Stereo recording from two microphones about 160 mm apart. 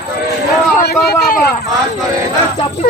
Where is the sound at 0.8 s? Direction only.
75° left (ahead or behind).